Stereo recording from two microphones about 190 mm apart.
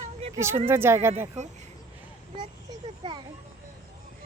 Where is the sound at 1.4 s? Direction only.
35° right (ahead or behind).